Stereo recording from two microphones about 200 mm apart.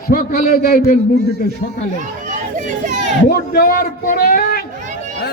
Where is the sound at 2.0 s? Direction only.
40° right (ahead or behind).